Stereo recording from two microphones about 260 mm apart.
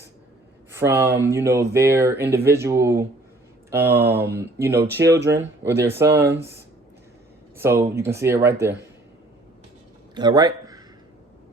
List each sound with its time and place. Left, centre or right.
0.7 s speech: centre
2.2 s speech: right
2.5 s speech: centre
6.1 s speech: right
7.5 s speech: centre
10.2 s a man's voice: centre